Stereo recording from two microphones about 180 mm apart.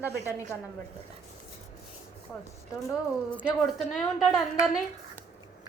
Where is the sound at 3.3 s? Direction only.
10° left (ahead or behind).